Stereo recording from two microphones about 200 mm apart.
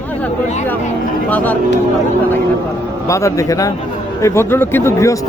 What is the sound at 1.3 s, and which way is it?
Speech, 10° left (ahead or behind).